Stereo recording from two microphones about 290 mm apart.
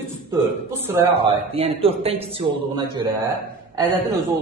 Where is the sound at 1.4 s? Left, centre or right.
Centre.